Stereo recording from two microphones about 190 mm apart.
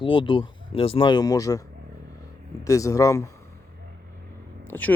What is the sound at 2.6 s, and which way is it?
Speech, 15° left (ahead or behind).